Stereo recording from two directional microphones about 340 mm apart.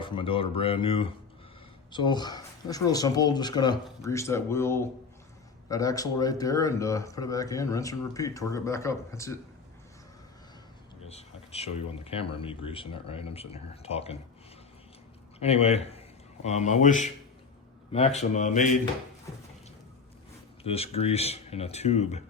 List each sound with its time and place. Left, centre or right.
0.0 s speech: centre
11.1 s speech: centre
15.4 s speech: centre
20.7 s speech: centre